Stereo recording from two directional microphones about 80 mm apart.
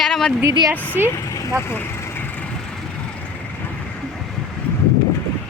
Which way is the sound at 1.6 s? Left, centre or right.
Left.